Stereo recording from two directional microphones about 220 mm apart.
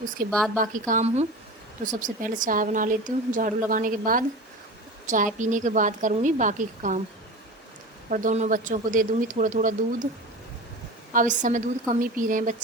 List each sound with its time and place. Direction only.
0.3 s a woman's voice: 5° left (ahead or behind)
0.5 s a woman's voice: 35° right (ahead or behind)
8.1 s a woman's voice: 35° right (ahead or behind)
11.1 s a woman's voice: 35° right (ahead or behind)